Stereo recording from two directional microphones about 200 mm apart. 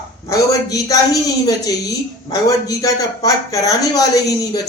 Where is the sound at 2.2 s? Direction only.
15° left (ahead or behind).